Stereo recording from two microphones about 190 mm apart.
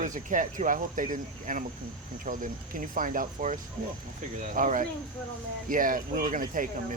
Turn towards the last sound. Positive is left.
turn(degrees=-45)  # may be behind; listen again after turning